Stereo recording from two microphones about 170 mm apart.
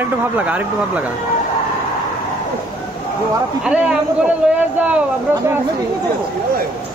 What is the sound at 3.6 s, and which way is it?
Speech, 5° right (ahead or behind).